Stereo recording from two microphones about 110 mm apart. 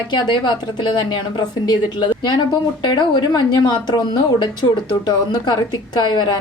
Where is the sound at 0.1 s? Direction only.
45° left (ahead or behind).